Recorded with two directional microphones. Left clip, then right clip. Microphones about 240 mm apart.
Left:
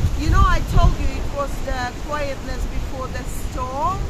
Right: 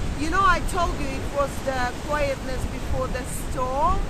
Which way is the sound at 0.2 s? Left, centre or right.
Centre.